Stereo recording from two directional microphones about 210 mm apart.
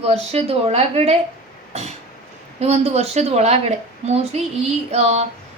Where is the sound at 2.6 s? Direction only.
30° right (ahead or behind).